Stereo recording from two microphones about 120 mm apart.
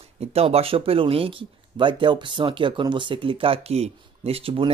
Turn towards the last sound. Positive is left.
turn(degrees=-50)  # may be behind; listen again after turning